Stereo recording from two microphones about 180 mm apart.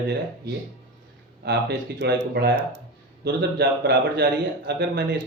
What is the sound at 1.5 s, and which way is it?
A man's voice, 65° right (ahead or behind).